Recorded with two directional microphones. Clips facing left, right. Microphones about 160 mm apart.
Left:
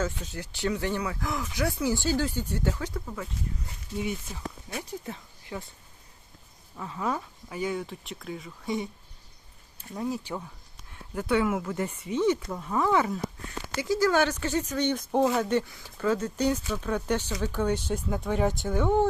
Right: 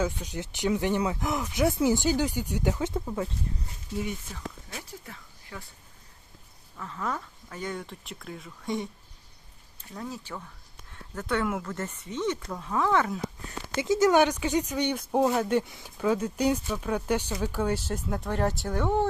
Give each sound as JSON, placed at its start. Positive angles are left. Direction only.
{"t": 0.0, "sound": "speech", "side_deg": -15}
{"t": 3.9, "sound": "speech", "side_deg": 5}
{"t": 4.8, "sound": "speech", "side_deg": 20}
{"t": 6.7, "sound": "speech", "side_deg": 15}
{"t": 9.9, "sound": "speech", "side_deg": 15}
{"t": 13.7, "sound": "speech", "side_deg": -20}